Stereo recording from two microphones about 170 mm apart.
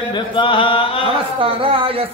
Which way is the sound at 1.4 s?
30° right (ahead or behind).